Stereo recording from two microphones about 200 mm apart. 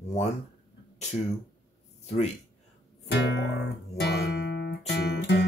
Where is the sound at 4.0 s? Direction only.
55° left (ahead or behind).